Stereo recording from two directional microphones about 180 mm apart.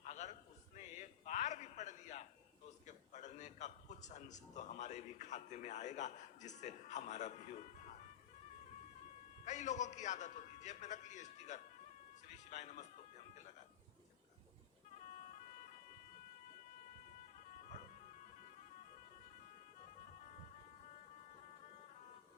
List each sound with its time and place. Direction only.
0.0 s a sound: 40° left (ahead or behind)
2.8 s a man's voice: 40° left (ahead or behind)
9.4 s a man's voice: 40° left (ahead or behind)